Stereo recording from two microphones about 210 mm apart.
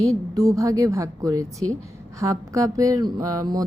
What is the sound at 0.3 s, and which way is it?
Speech, 15° right (ahead or behind).